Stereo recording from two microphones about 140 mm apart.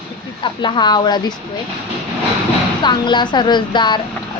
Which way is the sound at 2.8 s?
30° left (ahead or behind).